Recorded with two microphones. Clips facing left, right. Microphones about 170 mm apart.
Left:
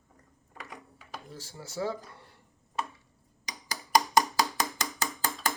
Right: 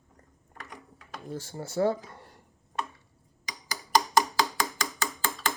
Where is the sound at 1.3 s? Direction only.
55° right (ahead or behind).